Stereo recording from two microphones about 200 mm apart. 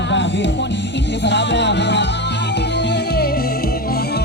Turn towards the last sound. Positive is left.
turn(degrees=50)  # may be behind; listen again after turning